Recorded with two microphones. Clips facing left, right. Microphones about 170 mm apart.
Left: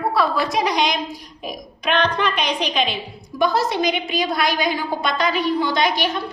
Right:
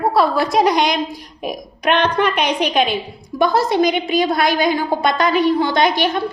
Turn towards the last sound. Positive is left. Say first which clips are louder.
# right 4 dB
turn(degrees=-50)  # may be behind; listen again after turning